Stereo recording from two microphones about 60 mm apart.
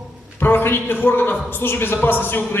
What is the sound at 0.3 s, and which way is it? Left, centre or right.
Speech, left.